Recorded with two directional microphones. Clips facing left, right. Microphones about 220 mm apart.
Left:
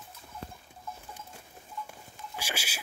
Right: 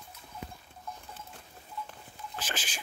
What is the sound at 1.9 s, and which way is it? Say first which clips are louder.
Patter: even; 10° left (ahead or behind).